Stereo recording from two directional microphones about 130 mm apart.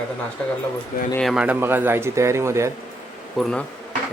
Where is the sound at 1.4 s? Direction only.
15° right (ahead or behind).